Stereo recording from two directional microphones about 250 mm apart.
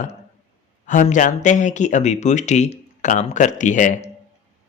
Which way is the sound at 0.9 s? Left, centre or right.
Left.